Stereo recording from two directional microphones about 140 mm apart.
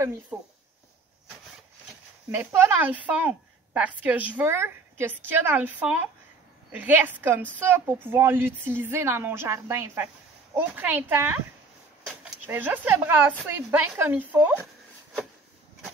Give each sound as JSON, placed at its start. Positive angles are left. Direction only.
{"t": 0.3, "sound": "a woman's voice", "side_deg": -15}
{"t": 2.3, "sound": "a woman's voice", "side_deg": -15}
{"t": 12.4, "sound": "a woman's voice", "side_deg": -15}